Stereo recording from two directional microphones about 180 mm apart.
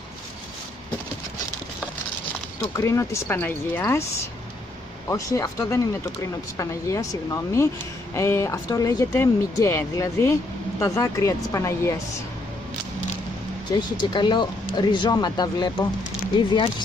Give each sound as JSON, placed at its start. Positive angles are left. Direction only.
{"t": 2.7, "sound": "a woman's voice", "side_deg": 15}
{"t": 5.0, "sound": "a woman's voice", "side_deg": 15}
{"t": 13.7, "sound": "speech", "side_deg": 25}